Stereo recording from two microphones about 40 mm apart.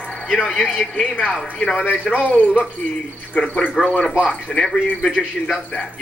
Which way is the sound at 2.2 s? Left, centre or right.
Left.